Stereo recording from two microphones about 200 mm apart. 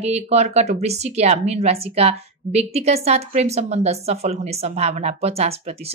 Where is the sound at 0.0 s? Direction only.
30° right (ahead or behind).